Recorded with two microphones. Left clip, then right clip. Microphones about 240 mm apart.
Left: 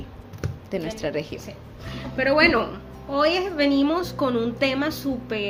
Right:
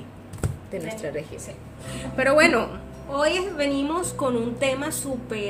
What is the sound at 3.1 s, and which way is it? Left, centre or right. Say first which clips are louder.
A woman's voice: left 2 dB; centre.